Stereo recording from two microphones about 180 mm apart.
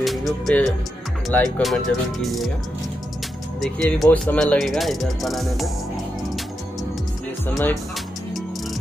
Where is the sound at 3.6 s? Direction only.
5° left (ahead or behind).